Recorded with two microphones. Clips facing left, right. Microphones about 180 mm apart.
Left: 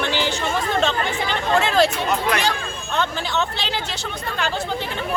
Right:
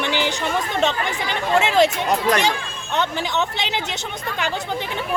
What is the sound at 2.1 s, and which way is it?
Speech, 40° right (ahead or behind).